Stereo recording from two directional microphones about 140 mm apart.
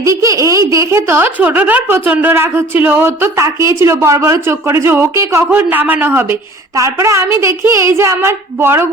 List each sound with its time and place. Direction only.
0.0 s speech: 20° right (ahead or behind)